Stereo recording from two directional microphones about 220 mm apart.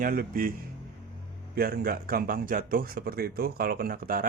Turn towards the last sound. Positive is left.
turn(degrees=-40)  # may be behind; listen again after turning